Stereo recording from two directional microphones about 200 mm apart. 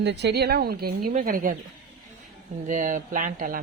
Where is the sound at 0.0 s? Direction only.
60° right (ahead or behind).